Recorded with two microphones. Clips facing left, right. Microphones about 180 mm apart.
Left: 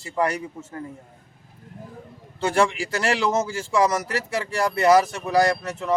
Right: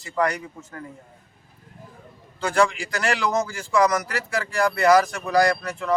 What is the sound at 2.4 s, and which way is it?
A man's voice, 25° left (ahead or behind).